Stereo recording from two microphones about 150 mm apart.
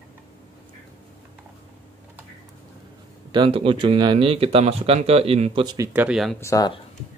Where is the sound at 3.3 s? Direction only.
35° right (ahead or behind).